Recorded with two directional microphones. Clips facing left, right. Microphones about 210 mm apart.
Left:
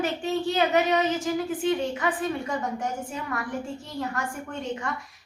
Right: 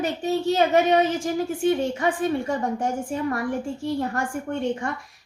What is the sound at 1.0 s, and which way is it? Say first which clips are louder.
Speech: right 3 dB; 50° right (ahead or behind).